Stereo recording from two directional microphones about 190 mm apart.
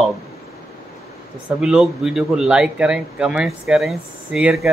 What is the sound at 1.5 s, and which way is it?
Speech, 5° right (ahead or behind).